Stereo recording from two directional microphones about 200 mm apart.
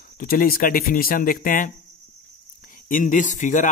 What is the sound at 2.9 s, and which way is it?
Speech, 40° left (ahead or behind).